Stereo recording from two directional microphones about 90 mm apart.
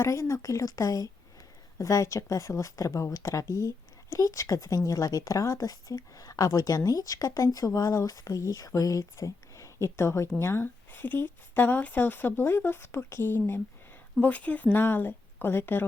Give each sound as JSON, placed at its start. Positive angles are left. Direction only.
{"t": 0.0, "sound": "speech", "side_deg": 35}